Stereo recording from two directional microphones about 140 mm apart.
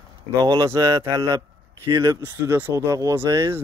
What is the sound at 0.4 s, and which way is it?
Speech, 25° right (ahead or behind).